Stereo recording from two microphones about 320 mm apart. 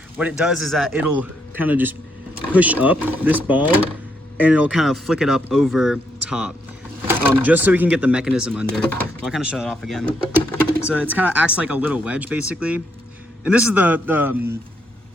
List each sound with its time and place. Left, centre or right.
0.2 s speech: centre